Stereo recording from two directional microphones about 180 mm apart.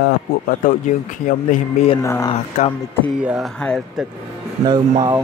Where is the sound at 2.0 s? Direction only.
15° left (ahead or behind).